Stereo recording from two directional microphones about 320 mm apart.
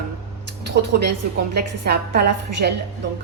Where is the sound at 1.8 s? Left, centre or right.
Right.